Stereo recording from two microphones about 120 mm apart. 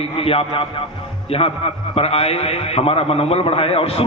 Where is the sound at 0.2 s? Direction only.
55° left (ahead or behind).